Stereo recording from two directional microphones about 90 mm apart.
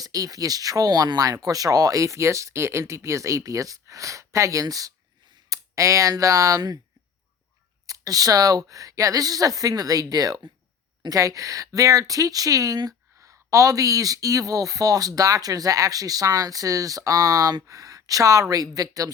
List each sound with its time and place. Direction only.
0.0 s speech: 40° right (ahead or behind)
7.9 s speech: 40° right (ahead or behind)